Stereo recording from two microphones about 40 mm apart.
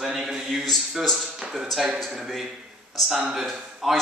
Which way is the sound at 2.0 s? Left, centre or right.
Centre.